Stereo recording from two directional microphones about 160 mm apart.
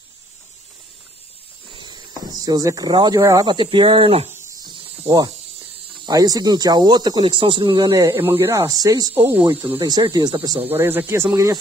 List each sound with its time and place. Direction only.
1.8 s speech: 25° right (ahead or behind)
5.0 s speech: 25° right (ahead or behind)
8.1 s speech: 15° right (ahead or behind)
10.7 s speech: 15° right (ahead or behind)